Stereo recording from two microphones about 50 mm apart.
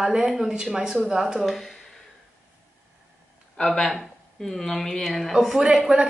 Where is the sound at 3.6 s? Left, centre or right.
Centre.